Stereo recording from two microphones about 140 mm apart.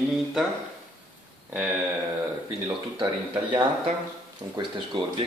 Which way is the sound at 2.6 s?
30° right (ahead or behind).